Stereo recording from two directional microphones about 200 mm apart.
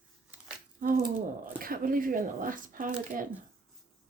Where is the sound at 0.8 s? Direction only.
40° right (ahead or behind).